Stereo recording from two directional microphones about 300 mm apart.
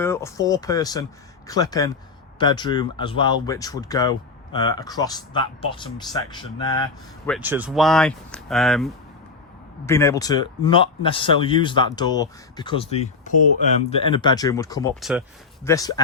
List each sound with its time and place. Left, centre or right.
0.0 s speech: centre
7.3 s speech: centre